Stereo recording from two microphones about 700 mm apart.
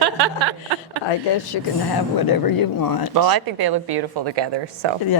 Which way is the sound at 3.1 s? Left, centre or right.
Right.